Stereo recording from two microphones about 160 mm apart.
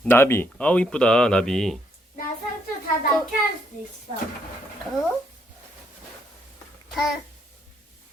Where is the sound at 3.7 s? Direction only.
55° left (ahead or behind).